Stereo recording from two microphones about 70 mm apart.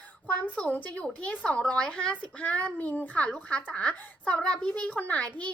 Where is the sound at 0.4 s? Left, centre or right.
Centre.